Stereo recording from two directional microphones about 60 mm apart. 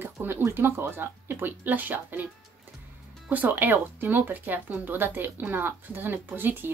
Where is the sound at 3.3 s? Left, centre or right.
Right.